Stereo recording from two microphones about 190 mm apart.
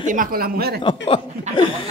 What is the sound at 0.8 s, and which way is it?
Speech, 25° left (ahead or behind).